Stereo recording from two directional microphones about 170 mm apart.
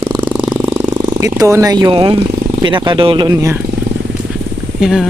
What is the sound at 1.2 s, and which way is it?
Speech, 20° right (ahead or behind).